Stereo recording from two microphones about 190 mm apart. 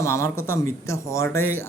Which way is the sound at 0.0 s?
15° left (ahead or behind).